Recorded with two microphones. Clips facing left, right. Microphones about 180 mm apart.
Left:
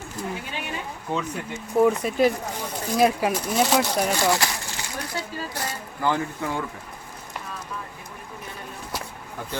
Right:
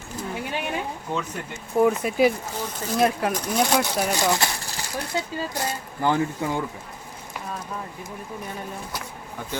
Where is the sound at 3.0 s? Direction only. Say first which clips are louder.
Left 2 dB; 5° left (ahead or behind).